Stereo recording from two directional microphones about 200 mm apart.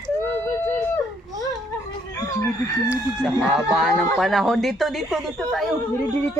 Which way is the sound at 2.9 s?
Centre (ahead or behind).